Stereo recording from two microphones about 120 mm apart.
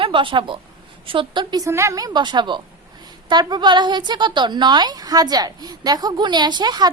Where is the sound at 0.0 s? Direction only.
45° right (ahead or behind).